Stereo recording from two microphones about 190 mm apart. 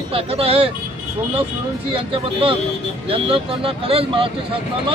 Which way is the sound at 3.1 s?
30° right (ahead or behind).